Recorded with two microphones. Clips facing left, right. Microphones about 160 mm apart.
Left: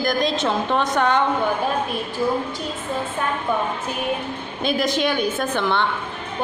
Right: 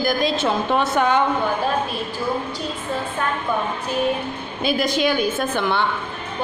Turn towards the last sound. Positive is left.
turn(degrees=-5)  # may be behind; listen again after turning